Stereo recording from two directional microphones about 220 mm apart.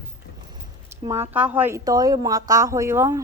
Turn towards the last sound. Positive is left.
turn(degrees=-10)  # may be behind; listen again after turning